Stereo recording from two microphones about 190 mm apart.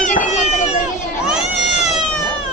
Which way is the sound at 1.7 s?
35° left (ahead or behind).